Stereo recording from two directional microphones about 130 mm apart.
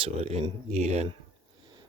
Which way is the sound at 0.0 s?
50° right (ahead or behind).